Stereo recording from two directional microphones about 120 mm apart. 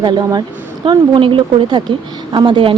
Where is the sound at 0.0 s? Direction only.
35° right (ahead or behind).